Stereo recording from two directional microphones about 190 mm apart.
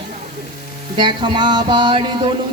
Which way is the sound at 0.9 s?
25° right (ahead or behind).